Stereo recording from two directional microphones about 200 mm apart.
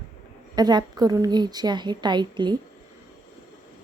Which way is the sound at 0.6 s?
20° right (ahead or behind).